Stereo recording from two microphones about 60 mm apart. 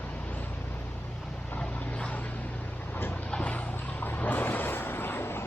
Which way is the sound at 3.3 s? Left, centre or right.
Left.